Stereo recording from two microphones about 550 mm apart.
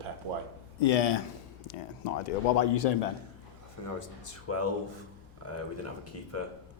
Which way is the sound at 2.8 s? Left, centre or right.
Left.